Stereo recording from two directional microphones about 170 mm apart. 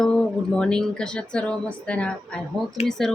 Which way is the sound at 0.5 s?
5° left (ahead or behind).